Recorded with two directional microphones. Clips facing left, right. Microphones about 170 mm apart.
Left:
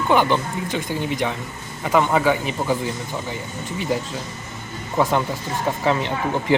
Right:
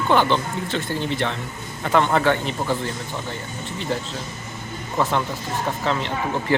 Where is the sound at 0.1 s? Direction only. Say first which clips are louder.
Left 1 dB; 10° left (ahead or behind).